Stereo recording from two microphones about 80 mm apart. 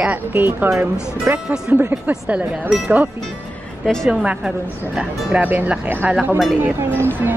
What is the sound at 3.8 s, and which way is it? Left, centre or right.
Speech, centre.